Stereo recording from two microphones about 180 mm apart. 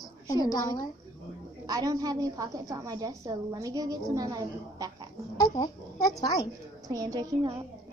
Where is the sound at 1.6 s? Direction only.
20° right (ahead or behind).